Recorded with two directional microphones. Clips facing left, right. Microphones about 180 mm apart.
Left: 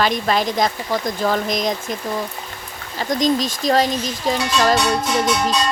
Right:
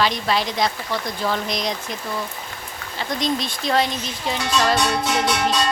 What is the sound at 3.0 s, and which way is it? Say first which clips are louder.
Speech: left 5 dB; 40° left (ahead or behind).